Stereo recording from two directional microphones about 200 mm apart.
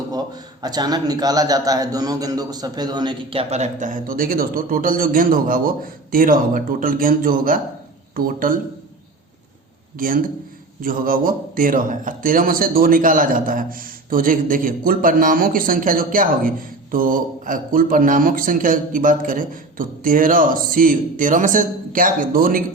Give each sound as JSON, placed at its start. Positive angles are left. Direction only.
{"t": 0.6, "sound": "a man's voice", "side_deg": -20}
{"t": 10.0, "sound": "a man's voice", "side_deg": -45}